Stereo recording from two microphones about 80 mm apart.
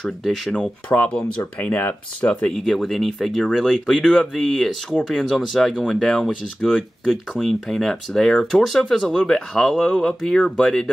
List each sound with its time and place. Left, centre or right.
0.0 s speech: centre
0.6 s speech: centre
2.6 s speech: centre